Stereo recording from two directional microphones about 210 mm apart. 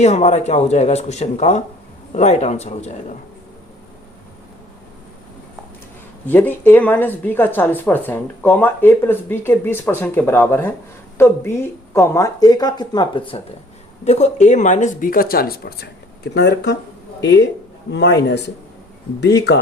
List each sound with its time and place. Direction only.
0.0 s speech: 30° left (ahead or behind)
6.2 s a man's voice: 10° left (ahead or behind); by 19.5 s 55° left (ahead or behind)